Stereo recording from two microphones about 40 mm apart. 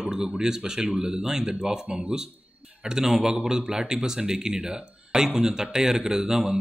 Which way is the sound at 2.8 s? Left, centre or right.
Centre.